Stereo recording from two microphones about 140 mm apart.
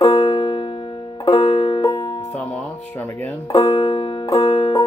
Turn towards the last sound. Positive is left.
turn(degrees=35)  # may be behind; listen again after turning